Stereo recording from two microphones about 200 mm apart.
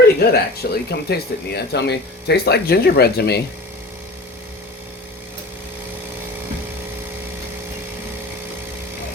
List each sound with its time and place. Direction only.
0.2 s speech: 50° left (ahead or behind)